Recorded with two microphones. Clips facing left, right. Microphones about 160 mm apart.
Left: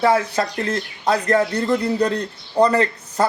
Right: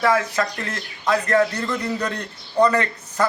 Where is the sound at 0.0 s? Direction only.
30° left (ahead or behind).